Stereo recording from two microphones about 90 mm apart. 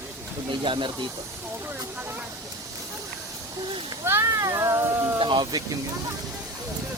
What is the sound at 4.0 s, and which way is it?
Speech, 30° right (ahead or behind).